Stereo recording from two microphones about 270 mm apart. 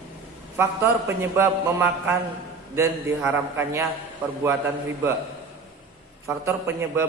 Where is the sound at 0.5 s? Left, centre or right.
Centre.